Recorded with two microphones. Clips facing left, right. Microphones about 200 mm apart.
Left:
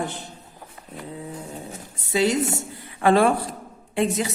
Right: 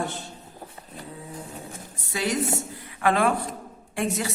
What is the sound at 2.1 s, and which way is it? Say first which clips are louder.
A man's voice: left 5 dB; 25° left (ahead or behind).